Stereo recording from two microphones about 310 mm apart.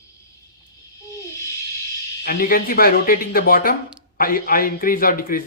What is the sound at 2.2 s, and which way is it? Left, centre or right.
A man's voice, left.